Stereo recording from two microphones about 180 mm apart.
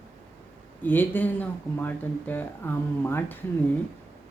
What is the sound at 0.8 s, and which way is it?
Speech, 10° left (ahead or behind).